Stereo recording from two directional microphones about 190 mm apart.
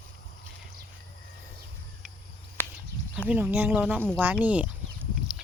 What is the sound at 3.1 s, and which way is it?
Speech, 5° right (ahead or behind).